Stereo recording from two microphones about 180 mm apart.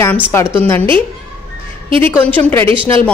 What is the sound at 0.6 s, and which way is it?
Speech, 10° left (ahead or behind).